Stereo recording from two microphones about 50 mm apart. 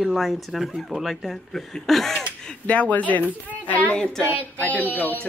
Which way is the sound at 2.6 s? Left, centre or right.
Left.